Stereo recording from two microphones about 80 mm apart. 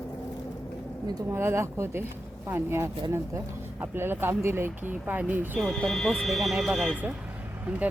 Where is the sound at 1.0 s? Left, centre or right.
Right.